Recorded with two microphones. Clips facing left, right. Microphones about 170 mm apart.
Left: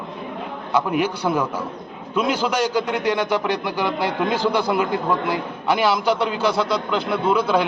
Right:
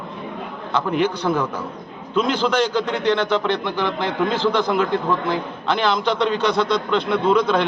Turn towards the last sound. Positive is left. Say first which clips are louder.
# right 2 dB
turn(degrees=5)  # may be behind; listen again after turning